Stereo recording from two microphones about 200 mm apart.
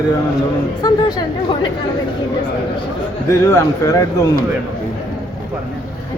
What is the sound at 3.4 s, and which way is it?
Speech, 15° left (ahead or behind).